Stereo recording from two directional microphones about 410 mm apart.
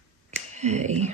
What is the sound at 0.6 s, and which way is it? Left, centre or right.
Whispering, centre.